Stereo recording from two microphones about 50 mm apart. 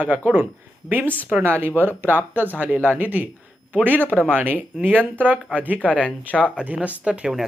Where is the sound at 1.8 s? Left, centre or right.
Right.